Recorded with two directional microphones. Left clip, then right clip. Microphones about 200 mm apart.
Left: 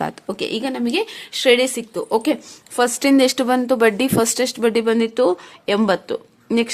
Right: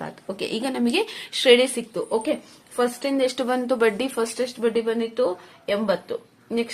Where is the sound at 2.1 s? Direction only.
45° left (ahead or behind).